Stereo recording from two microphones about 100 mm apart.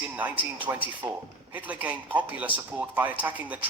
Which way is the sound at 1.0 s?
35° right (ahead or behind).